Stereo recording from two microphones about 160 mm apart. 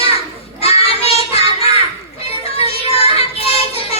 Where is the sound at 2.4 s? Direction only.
40° left (ahead or behind).